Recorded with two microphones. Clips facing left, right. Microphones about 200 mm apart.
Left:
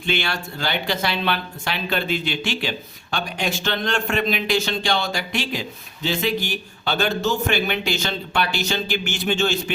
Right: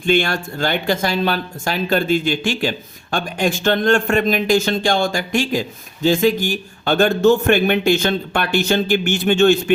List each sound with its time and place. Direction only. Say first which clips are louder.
0.0 s speech: right 8 dB; 50° right (ahead or behind)